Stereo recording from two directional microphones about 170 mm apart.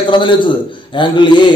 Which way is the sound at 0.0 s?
30° left (ahead or behind).